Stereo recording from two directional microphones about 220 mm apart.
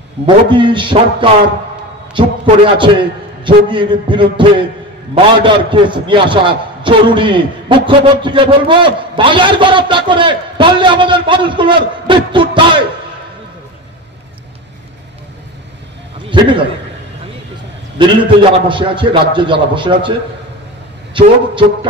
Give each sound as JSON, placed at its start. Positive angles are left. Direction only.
{"t": 0.5, "sound": "a man's voice", "side_deg": -20}
{"t": 16.3, "sound": "a man's voice", "side_deg": -20}
{"t": 18.0, "sound": "a man's voice", "side_deg": -20}